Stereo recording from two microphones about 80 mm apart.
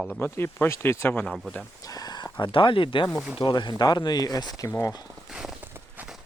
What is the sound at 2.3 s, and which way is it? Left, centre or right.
Speech, left.